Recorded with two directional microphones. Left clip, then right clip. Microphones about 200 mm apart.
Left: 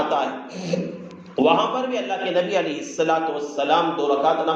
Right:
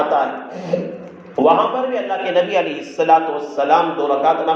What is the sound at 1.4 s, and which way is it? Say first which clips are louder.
A man's voice: right 5 dB; 15° left (ahead or behind).